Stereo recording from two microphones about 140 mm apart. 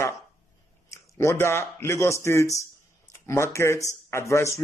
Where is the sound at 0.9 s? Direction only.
20° left (ahead or behind).